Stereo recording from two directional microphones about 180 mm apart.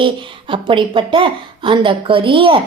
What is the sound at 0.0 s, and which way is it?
Speech, 30° right (ahead or behind).